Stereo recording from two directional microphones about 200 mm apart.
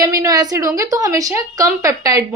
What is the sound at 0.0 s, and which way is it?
A woman's voice, 20° right (ahead or behind).